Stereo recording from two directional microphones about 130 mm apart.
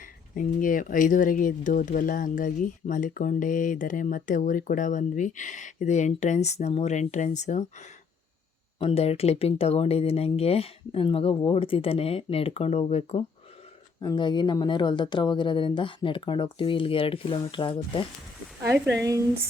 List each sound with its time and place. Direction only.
0.0 s speech: 90° left; by 7.9 s 65° left (ahead or behind)
8.8 s speech: 50° left (ahead or behind)
14.0 s speech: 35° left (ahead or behind)
18.7 s a woman's voice: 25° right (ahead or behind)